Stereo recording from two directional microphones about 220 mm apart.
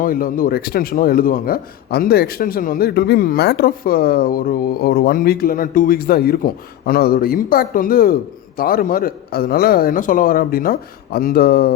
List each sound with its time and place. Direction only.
0.0 s a man's voice: 40° left (ahead or behind)